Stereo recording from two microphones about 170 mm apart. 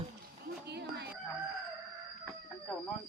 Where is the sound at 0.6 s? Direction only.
75° right (ahead or behind).